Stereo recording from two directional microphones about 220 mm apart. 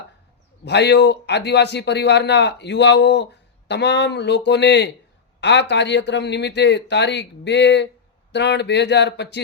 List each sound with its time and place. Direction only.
0.6 s a man's voice: 50° left (ahead or behind)